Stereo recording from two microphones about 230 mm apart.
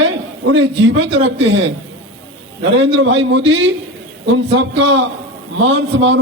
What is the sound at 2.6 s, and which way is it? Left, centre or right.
A man's voice, right.